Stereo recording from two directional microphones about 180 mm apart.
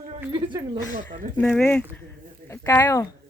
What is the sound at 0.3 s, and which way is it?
Speech, 25° right (ahead or behind).